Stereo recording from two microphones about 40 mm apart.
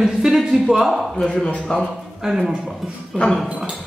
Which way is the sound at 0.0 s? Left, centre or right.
Centre.